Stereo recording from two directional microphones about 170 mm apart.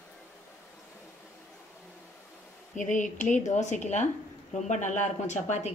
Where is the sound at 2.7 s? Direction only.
45° left (ahead or behind).